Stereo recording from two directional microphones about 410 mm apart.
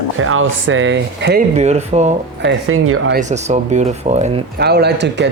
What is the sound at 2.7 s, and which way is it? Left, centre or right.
Speech, right.